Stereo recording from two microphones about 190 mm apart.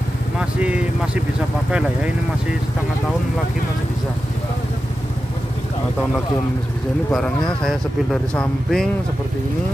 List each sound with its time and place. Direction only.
0.4 s speech: 5° right (ahead or behind)
7.1 s speech: centre (ahead or behind)